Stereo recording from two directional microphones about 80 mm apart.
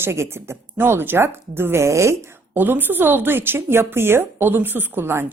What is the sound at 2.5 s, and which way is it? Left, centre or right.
A woman's voice, right.